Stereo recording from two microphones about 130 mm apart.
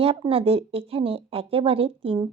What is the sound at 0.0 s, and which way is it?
Speech, 45° right (ahead or behind).